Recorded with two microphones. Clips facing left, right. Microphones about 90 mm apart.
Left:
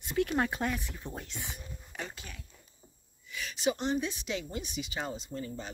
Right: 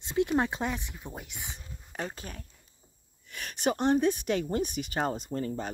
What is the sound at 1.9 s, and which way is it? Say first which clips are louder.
Speech: right 6 dB; 40° right (ahead or behind).